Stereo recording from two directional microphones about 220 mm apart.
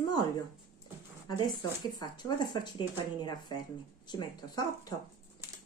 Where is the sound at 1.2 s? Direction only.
20° left (ahead or behind).